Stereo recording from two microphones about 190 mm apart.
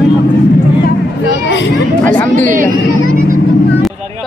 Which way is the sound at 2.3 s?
45° right (ahead or behind).